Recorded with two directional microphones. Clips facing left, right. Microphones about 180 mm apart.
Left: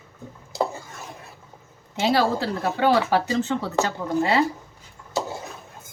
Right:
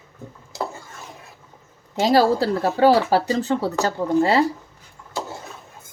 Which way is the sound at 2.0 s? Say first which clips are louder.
Right 4 dB; 40° right (ahead or behind).